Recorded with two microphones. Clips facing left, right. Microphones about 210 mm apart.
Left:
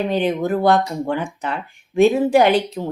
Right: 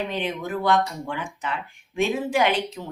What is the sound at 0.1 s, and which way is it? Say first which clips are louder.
Speech: left 9 dB; 35° left (ahead or behind).